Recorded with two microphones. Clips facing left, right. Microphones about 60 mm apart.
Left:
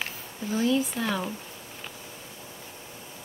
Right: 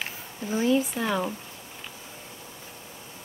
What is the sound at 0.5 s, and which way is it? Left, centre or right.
Speech, centre.